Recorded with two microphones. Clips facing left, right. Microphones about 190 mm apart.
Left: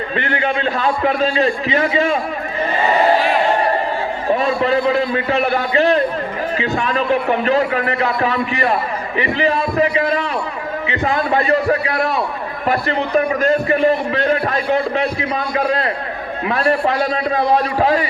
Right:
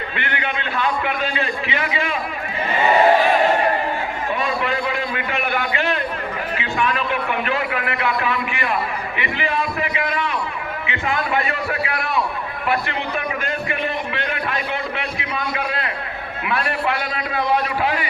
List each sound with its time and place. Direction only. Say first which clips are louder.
0.2 s a man's voice: left 8 dB; 35° left (ahead or behind)
4.3 s a man's voice: left 8 dB; 40° left (ahead or behind)